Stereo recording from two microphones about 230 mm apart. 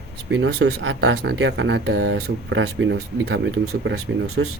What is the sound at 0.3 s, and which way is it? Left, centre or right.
Speech, right.